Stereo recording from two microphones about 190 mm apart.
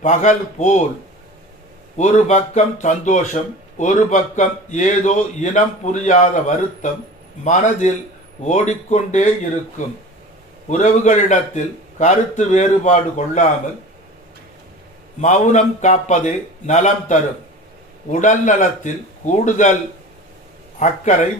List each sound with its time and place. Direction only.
0.0 s speech: 40° left (ahead or behind)
2.0 s speech: 40° left (ahead or behind)
7.4 s speech: 40° left (ahead or behind)
15.2 s speech: 40° left (ahead or behind)
20.7 s speech: 40° left (ahead or behind)